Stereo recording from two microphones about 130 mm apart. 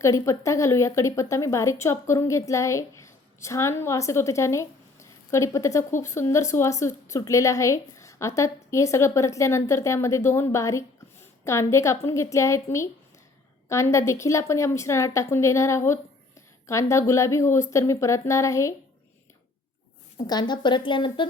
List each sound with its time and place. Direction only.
0.0 s a woman's voice: 25° left (ahead or behind)
20.2 s speech: 35° left (ahead or behind)